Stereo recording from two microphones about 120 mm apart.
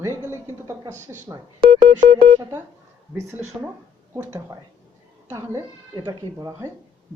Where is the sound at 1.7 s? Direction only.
80° right.